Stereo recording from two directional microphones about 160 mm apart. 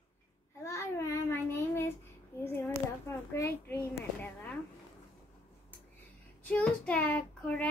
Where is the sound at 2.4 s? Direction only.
15° left (ahead or behind).